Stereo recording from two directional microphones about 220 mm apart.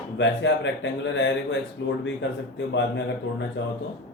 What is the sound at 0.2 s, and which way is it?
A man's voice, 55° left (ahead or behind).